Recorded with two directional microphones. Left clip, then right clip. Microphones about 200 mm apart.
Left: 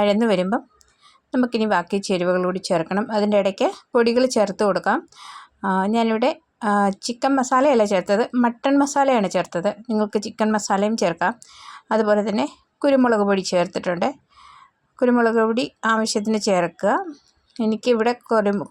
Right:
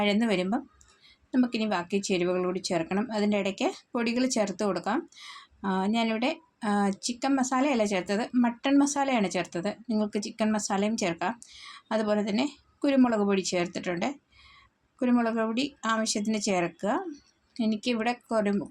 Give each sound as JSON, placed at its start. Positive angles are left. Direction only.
{"t": 0.0, "sound": "speech", "side_deg": 35}